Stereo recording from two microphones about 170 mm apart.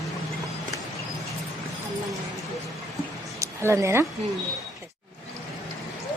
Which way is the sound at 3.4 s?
15° right (ahead or behind).